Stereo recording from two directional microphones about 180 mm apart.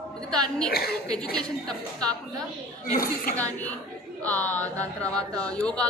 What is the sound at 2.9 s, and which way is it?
Speech, 50° left (ahead or behind).